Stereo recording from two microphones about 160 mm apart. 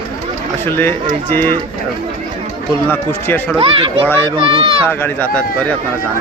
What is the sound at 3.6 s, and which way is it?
Speech, 35° right (ahead or behind).